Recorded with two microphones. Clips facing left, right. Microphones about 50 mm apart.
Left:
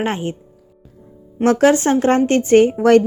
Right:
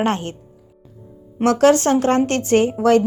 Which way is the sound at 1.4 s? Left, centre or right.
Left.